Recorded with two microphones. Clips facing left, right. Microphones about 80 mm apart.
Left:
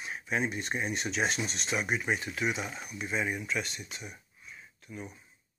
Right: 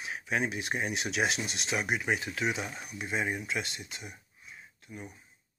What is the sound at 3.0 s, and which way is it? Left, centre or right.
Speech, right.